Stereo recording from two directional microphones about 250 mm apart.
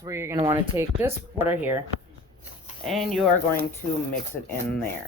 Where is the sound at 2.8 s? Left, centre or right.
Centre.